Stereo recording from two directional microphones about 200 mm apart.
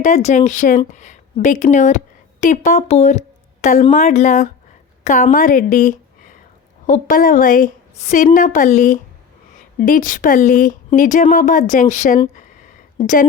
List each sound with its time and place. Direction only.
0.0 s a woman's voice: 35° left (ahead or behind)